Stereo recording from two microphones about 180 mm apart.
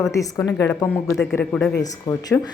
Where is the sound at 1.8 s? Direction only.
20° left (ahead or behind).